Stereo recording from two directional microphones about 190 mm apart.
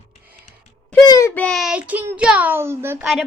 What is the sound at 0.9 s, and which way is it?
A child's voice, 20° left (ahead or behind).